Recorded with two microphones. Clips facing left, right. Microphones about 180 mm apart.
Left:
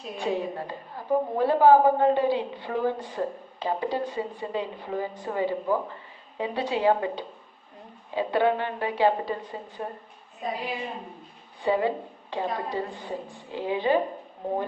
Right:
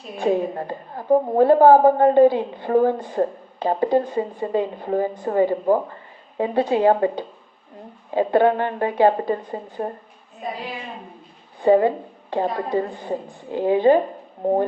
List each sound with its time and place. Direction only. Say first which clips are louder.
0.2 s a woman's voice: right 8 dB; 50° right (ahead or behind)
11.6 s a woman's voice: right 9 dB; 50° right (ahead or behind)